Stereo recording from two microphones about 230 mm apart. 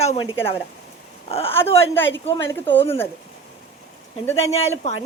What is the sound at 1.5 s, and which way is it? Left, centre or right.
Speech, centre.